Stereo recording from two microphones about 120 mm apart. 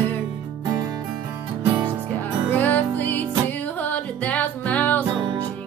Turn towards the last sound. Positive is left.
turn(degrees=15)  # may be behind; listen again after turning